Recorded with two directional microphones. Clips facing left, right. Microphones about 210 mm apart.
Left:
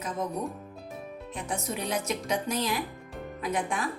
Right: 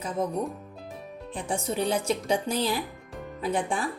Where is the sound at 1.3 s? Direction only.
30° right (ahead or behind).